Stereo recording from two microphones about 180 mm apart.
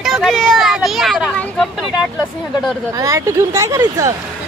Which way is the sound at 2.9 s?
20° right (ahead or behind).